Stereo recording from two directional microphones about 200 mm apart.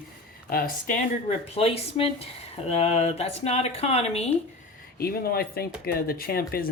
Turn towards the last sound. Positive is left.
turn(degrees=50)  # may be behind; listen again after turning